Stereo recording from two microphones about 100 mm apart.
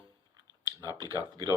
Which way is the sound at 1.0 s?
35° right (ahead or behind).